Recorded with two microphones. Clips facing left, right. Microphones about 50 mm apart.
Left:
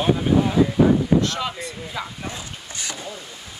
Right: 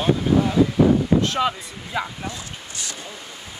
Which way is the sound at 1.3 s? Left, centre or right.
Centre.